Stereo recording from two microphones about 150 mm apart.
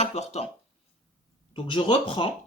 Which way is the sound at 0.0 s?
45° left (ahead or behind).